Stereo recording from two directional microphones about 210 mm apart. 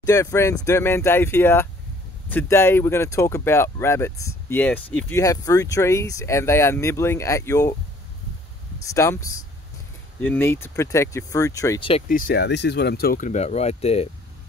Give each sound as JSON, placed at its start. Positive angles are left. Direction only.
{"t": 0.0, "sound": "speech", "side_deg": 15}
{"t": 8.9, "sound": "speech", "side_deg": 15}
{"t": 12.1, "sound": "speech", "side_deg": 45}